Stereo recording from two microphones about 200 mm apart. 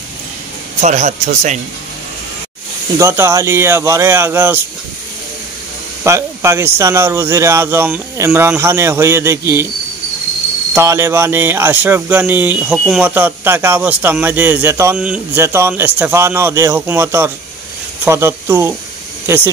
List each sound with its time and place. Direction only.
0.7 s speech: 35° right (ahead or behind)
3.0 s speech: 15° right (ahead or behind)
6.0 s speech: 15° right (ahead or behind)
10.7 s speech: 15° right (ahead or behind)